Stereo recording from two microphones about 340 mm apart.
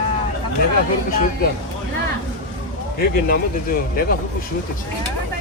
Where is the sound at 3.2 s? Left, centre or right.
Left.